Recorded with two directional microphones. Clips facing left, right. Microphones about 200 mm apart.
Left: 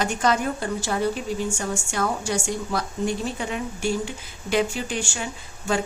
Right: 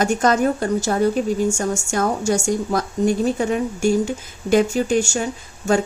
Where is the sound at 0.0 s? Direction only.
45° right (ahead or behind).